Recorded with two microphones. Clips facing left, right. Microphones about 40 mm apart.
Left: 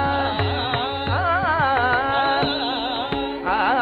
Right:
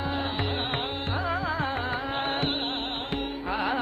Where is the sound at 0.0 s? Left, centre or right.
Left.